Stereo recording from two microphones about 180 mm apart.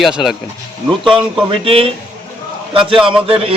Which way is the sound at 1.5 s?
30° right (ahead or behind).